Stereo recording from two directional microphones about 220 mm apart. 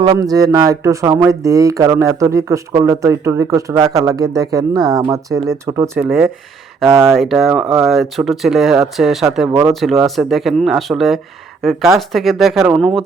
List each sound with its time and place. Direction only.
0.0 s speech: 20° right (ahead or behind)
6.1 s speech: centre (ahead or behind)